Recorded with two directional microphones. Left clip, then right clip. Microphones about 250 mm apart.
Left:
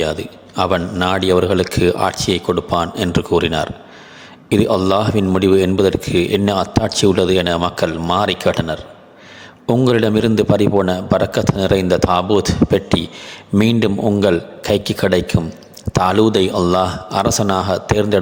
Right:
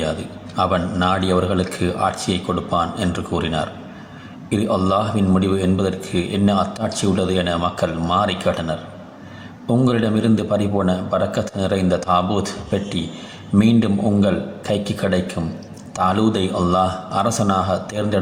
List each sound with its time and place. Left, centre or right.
0.0 s a man's voice: left